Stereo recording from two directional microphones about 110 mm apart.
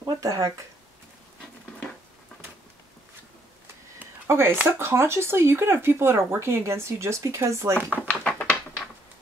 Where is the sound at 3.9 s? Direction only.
25° right (ahead or behind).